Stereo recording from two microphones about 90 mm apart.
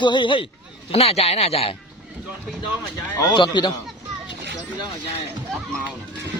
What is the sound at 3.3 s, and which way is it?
Speech, 60° left (ahead or behind).